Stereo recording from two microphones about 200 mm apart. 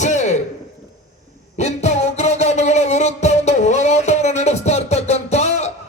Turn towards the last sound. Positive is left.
turn(degrees=35)  # may be behind; listen again after turning